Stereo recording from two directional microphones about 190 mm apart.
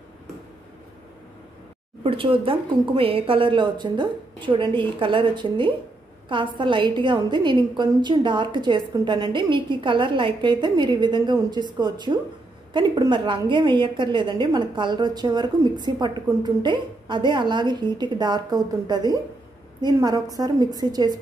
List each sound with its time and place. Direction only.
2.0 s a woman's voice: 30° right (ahead or behind)